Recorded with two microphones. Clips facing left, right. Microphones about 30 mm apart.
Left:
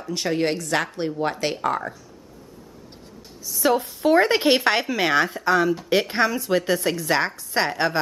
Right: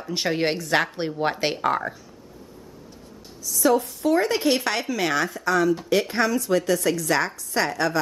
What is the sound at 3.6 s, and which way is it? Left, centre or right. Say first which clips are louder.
A woman's voice: even; left.